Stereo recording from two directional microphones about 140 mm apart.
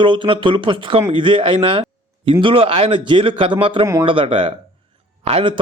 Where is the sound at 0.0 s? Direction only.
35° right (ahead or behind).